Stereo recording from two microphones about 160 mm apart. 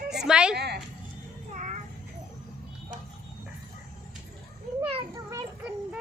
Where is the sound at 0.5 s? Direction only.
90° right.